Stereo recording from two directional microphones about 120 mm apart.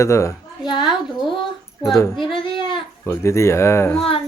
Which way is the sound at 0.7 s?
40° left (ahead or behind).